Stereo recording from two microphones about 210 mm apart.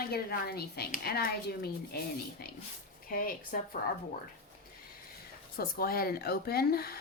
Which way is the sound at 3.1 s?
45° left (ahead or behind).